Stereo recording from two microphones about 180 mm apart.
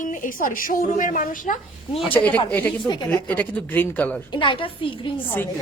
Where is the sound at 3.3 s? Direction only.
10° left (ahead or behind).